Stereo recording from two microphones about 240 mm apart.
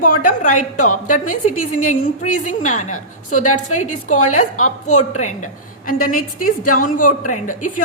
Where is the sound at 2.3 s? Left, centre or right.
Left.